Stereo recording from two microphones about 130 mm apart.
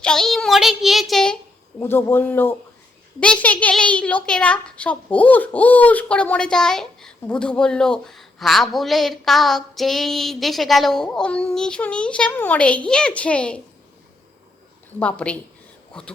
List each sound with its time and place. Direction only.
0.0 s a child's voice: 5° left (ahead or behind)
1.8 s a child's voice: 20° left (ahead or behind)
14.9 s speech: 10° left (ahead or behind)